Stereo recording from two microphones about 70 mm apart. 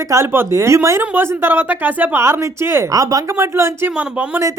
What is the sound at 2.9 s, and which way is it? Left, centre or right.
Speech, right.